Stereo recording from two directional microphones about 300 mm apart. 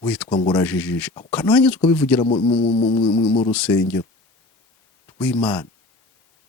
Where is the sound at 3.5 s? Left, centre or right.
Centre.